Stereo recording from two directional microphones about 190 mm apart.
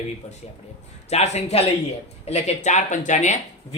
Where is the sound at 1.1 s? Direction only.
35° left (ahead or behind).